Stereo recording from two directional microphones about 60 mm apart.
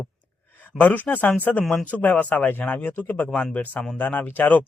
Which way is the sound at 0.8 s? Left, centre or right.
Left.